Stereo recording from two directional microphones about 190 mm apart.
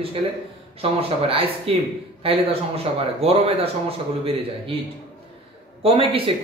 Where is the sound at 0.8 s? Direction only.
30° right (ahead or behind).